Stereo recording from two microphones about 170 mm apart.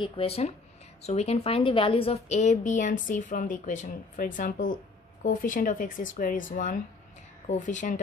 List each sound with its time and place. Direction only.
0.0 s a woman's voice: 35° left (ahead or behind)